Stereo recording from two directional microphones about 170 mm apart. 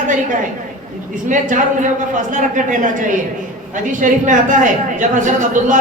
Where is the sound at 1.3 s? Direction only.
50° right (ahead or behind).